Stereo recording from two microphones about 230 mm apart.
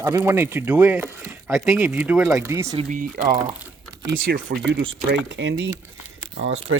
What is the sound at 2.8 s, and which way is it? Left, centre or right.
Speech, right.